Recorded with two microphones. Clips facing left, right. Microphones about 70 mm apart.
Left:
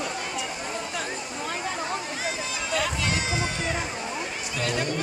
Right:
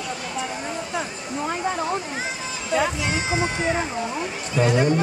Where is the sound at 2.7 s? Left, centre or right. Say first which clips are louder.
Right 5 dB; right.